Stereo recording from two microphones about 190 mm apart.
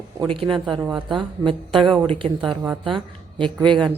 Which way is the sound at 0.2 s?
25° right (ahead or behind).